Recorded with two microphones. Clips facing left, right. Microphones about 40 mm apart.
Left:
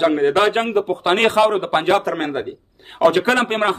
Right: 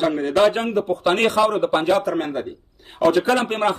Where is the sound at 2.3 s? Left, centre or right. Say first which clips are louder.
Left 2 dB; left.